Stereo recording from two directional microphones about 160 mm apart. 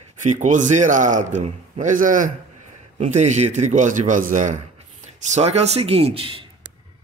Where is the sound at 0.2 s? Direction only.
50° right (ahead or behind).